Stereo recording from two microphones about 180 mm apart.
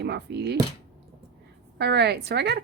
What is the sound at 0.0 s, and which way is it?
Speech, 70° right (ahead or behind).